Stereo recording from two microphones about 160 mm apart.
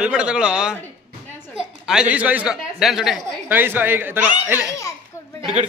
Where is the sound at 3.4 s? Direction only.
10° right (ahead or behind).